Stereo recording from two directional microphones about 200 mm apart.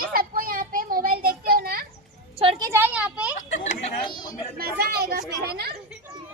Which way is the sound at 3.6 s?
35° left (ahead or behind).